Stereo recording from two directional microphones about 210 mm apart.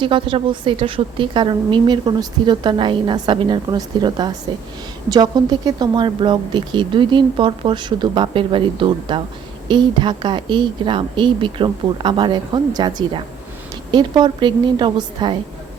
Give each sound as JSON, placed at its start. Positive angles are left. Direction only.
{"t": 0.0, "sound": "a woman's voice", "side_deg": -25}